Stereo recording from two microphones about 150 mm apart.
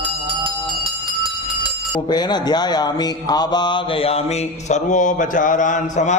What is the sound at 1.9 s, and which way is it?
Speech, 30° left (ahead or behind).